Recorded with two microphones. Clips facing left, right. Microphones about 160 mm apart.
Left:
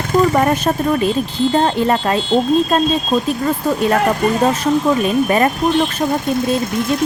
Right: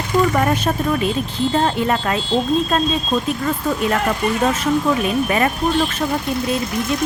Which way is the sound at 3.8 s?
40° left (ahead or behind).